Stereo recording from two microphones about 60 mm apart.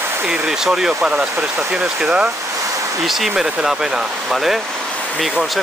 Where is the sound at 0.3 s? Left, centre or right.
Centre.